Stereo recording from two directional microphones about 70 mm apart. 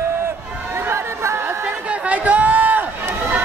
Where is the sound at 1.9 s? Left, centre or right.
Right.